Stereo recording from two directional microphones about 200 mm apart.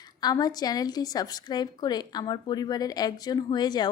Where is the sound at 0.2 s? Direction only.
20° left (ahead or behind).